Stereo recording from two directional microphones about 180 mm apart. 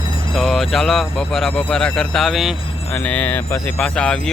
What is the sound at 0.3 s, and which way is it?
Speech, centre (ahead or behind).